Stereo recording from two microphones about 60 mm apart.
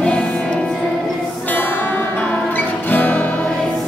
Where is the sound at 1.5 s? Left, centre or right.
Left.